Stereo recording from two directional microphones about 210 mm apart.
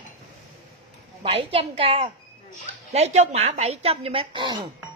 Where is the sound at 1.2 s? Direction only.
25° right (ahead or behind).